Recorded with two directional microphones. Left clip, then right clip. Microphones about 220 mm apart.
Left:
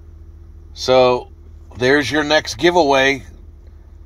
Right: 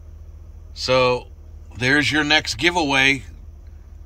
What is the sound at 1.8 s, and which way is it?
Speech, 35° left (ahead or behind).